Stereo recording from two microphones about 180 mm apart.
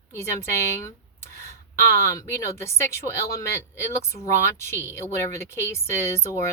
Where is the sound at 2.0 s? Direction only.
15° left (ahead or behind).